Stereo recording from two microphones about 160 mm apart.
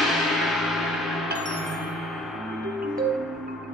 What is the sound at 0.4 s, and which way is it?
Gong, centre (ahead or behind).